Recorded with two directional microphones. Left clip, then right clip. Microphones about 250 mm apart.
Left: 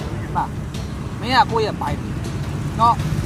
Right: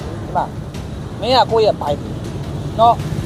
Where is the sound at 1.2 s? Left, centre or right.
Left.